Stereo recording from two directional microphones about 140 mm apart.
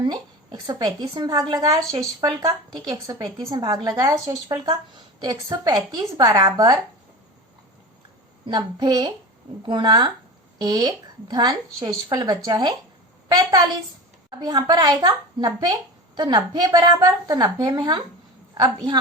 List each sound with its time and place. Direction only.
0.0 s a woman's voice: 30° right (ahead or behind)
8.4 s a woman's voice: 30° right (ahead or behind)